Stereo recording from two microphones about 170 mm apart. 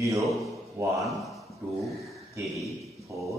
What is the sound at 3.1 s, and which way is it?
Speech, 15° right (ahead or behind).